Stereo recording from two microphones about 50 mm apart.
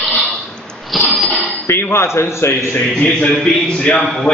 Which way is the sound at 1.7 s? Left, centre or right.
Left.